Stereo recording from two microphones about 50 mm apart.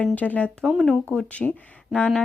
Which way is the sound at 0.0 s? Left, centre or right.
Left.